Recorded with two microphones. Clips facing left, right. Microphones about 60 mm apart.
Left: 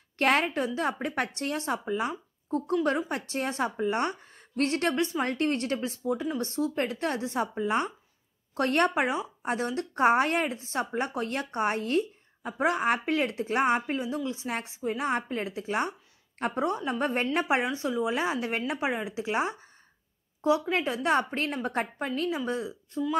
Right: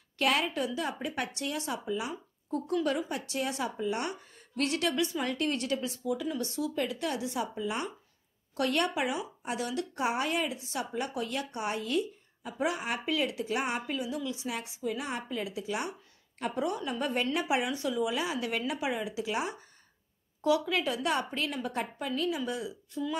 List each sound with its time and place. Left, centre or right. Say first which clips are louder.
0.2 s a woman's voice: left 4 dB; left